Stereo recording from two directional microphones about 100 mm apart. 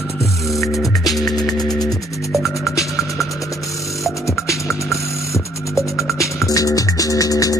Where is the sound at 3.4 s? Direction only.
35° left (ahead or behind).